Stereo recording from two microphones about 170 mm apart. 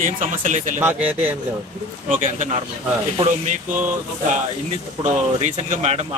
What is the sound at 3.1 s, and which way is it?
Speech, 35° right (ahead or behind).